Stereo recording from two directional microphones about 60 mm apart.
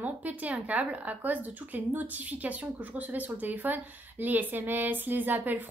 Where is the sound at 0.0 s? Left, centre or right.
Right.